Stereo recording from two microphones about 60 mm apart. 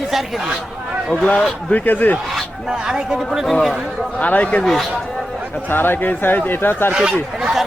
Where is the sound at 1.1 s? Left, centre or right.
Centre.